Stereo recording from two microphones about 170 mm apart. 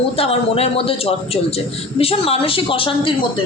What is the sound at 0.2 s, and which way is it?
A woman's voice, 35° left (ahead or behind).